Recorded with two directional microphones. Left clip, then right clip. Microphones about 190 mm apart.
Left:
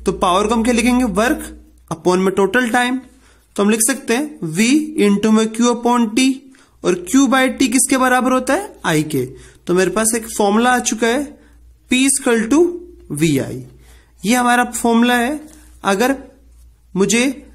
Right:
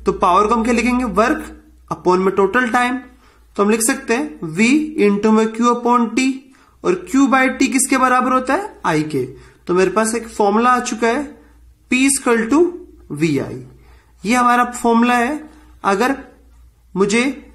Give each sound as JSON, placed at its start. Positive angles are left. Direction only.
{"t": 0.0, "sound": "speech", "side_deg": 35}